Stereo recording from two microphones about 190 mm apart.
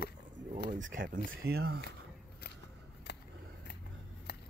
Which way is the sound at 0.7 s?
45° right (ahead or behind).